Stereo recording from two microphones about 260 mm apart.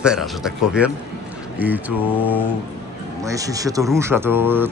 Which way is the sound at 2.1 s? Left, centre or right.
Centre.